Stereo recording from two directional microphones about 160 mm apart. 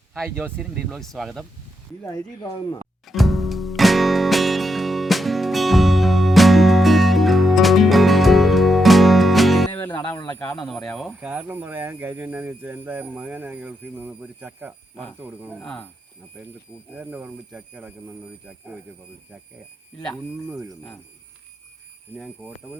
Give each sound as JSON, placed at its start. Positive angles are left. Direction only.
{"t": 0.1, "sound": "speech", "side_deg": 0}
{"t": 0.3, "sound": "speech", "side_deg": -10}
{"t": 2.0, "sound": "speech", "side_deg": 20}
{"t": 3.1, "sound": "music", "side_deg": 0}
{"t": 9.7, "sound": "music", "side_deg": 10}
{"t": 10.7, "sound": "speech", "side_deg": 5}
{"t": 15.6, "sound": "speech", "side_deg": 5}
{"t": 16.9, "sound": "speech", "side_deg": -10}
{"t": 22.1, "sound": "speech", "side_deg": -10}